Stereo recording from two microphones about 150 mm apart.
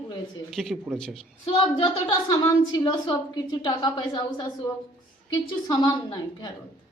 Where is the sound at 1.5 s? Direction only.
40° left (ahead or behind).